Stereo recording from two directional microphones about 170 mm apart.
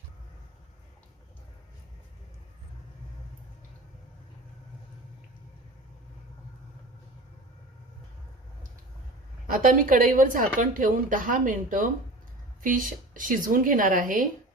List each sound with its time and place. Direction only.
9.5 s a woman's voice: 55° right (ahead or behind)